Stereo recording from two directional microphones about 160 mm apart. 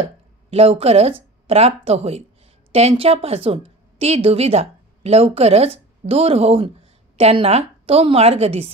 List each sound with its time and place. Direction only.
0.5 s a woman's voice: 40° right (ahead or behind)